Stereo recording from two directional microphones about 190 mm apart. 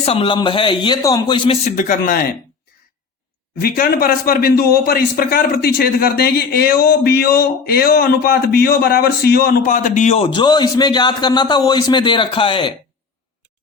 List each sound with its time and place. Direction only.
0.0 s a man's voice: 30° left (ahead or behind)
1.6 s a man's voice: 45° left (ahead or behind)
3.6 s a man's voice: 50° left (ahead or behind); by 12.7 s 25° left (ahead or behind)